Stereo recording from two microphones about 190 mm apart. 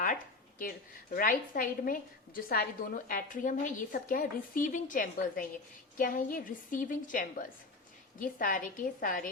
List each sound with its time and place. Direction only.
1.1 s a woman's voice: 50° left (ahead or behind)